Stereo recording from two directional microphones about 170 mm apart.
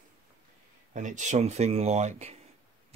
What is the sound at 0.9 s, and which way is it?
Speech, 45° right (ahead or behind).